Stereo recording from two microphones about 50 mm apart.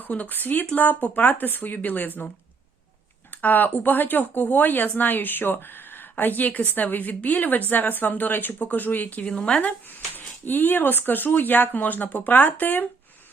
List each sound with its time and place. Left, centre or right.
0.0 s speech: left
3.4 s speech: left